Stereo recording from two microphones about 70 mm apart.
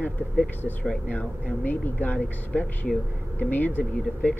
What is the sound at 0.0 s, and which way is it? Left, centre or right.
Speech, left.